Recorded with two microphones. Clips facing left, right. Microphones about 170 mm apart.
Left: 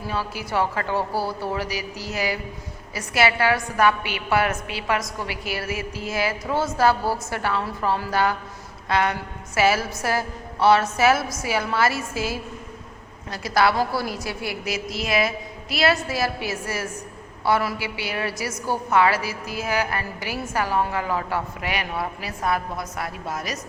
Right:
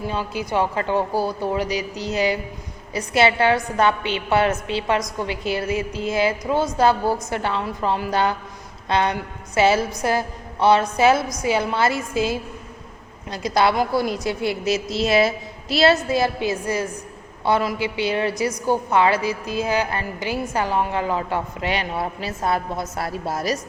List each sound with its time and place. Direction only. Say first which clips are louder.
0.1 s a woman's voice: right 1 dB; 20° right (ahead or behind)